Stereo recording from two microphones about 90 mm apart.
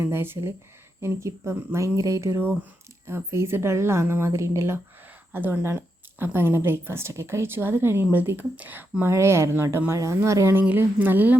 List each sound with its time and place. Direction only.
0.0 s a woman's voice: 25° right (ahead or behind)
10.6 s a woman's voice: 20° right (ahead or behind)